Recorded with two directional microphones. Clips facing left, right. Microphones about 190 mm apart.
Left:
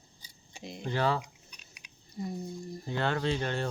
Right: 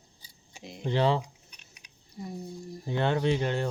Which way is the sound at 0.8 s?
20° right (ahead or behind).